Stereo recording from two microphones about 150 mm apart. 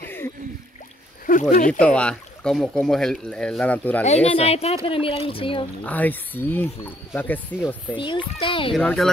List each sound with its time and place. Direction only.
1.2 s speech: 65° left (ahead or behind)
2.0 s speech: 5° left (ahead or behind)
4.0 s speech: 45° left (ahead or behind)
5.9 s speech: 10° left (ahead or behind)
7.9 s speech: 35° left (ahead or behind)
8.7 s speech: centre (ahead or behind)